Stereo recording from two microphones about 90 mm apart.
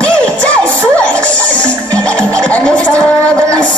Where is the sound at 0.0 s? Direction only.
15° left (ahead or behind).